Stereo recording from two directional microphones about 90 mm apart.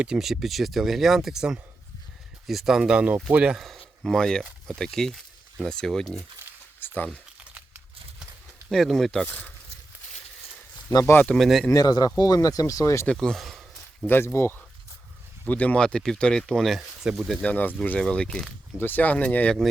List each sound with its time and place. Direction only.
0.0 s speech: 5° right (ahead or behind)
3.6 s speech: 5° left (ahead or behind)
6.7 s a sound: 20° left (ahead or behind)
8.7 s speech: centre (ahead or behind)
9.2 s speech: 20° left (ahead or behind)
11.0 s speech: 25° left (ahead or behind)
11.3 s speech: centre (ahead or behind)
11.7 s speech: 45° left (ahead or behind)
13.1 s speech: 5° left (ahead or behind)
14.3 s speech: 25° left (ahead or behind); by 17.4 s 5° right (ahead or behind)
17.4 s speech: 20° left (ahead or behind)
18.8 s speech: 20° left (ahead or behind)